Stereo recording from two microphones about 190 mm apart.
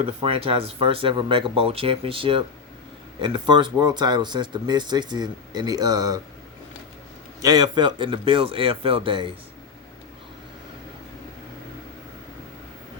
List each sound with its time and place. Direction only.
0.0 s speech: 30° right (ahead or behind)
7.4 s speech: 20° right (ahead or behind)